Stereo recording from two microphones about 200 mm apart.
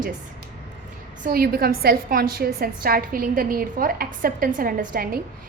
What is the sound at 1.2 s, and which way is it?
A woman's voice, 50° right (ahead or behind).